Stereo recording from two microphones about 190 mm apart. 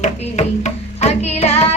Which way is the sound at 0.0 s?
35° left (ahead or behind).